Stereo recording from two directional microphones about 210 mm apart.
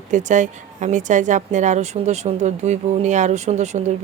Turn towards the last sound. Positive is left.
turn(degrees=-35)  # may be behind; listen again after turning